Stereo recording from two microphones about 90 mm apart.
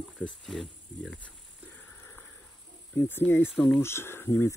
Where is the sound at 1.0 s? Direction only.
15° left (ahead or behind).